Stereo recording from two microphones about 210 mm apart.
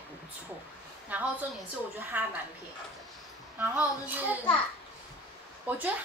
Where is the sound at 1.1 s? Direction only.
5° right (ahead or behind).